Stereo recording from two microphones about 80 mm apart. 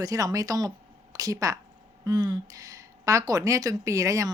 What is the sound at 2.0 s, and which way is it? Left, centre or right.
A woman's voice, right.